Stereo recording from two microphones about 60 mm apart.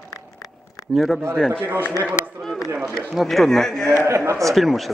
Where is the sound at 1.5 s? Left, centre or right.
Right.